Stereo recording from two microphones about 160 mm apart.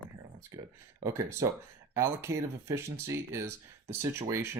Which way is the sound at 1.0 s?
15° right (ahead or behind).